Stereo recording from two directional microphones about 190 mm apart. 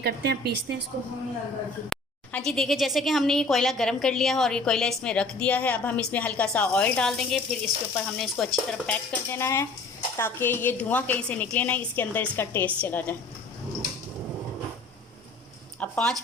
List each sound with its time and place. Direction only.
0.0 s a woman's voice: 60° right (ahead or behind)
1.9 s a woman's voice: 5° left (ahead or behind)
15.8 s speech: 5° left (ahead or behind)